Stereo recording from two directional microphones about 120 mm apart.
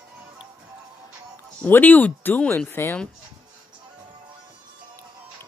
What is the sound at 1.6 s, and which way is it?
Speech, 15° left (ahead or behind).